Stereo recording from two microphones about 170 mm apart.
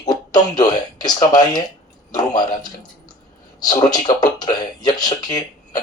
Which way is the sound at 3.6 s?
25° left (ahead or behind).